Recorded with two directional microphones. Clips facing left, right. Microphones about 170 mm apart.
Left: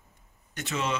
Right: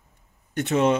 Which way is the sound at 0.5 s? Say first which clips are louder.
Right 11 dB; 55° right (ahead or behind).